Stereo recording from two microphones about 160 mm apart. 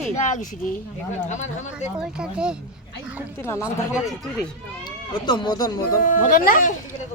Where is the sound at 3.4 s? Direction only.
15° left (ahead or behind).